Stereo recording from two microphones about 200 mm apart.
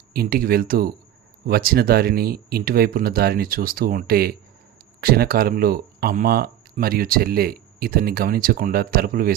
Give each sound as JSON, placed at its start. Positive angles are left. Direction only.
{"t": 0.1, "sound": "speech", "side_deg": -50}